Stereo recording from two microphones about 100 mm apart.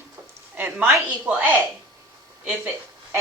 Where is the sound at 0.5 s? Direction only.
20° right (ahead or behind).